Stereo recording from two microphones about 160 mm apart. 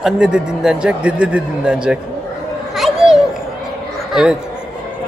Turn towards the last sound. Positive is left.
turn(degrees=-5)  # may be behind; listen again after turning